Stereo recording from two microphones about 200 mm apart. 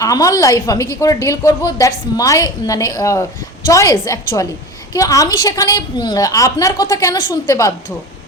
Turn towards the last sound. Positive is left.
turn(degrees=15)  # may be behind; listen again after turning